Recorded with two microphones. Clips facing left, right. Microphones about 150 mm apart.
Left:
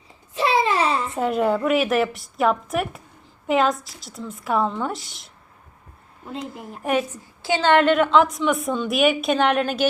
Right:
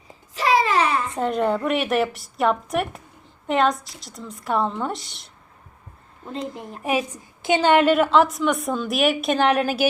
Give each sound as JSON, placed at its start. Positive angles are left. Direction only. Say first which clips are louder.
{"t": 0.5, "sound": "a sound", "louder": "right 2 dB", "side_deg": 30}
{"t": 1.1, "sound": "a woman's voice", "louder": "left 1 dB", "side_deg": 5}
{"t": 6.5, "sound": "a woman's voice", "louder": "left 2 dB", "side_deg": 0}
{"t": 7.1, "sound": "a woman's voice", "louder": "right 3 dB", "side_deg": -15}